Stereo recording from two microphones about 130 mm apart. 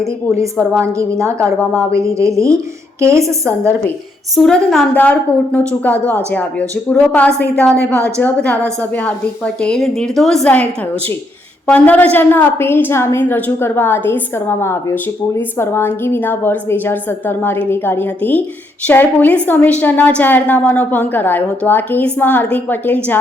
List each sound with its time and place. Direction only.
0.8 s a woman's voice: 25° right (ahead or behind)
4.4 s a woman's voice: 5° left (ahead or behind)